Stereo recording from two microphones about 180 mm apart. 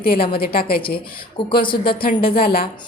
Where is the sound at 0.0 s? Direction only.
55° left (ahead or behind).